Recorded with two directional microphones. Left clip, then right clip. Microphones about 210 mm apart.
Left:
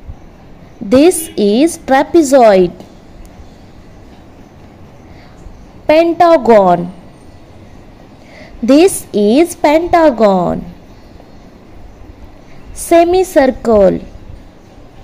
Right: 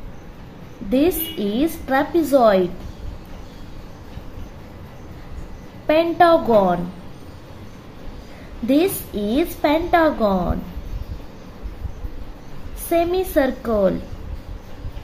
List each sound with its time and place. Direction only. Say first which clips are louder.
0.8 s a woman's voice: left 10 dB; 30° left (ahead or behind)
5.9 s a woman's voice: left 7 dB; 35° left (ahead or behind)
8.6 s a woman's voice: left 10 dB; 30° left (ahead or behind)
12.9 s a woman's voice: left 10 dB; 35° left (ahead or behind)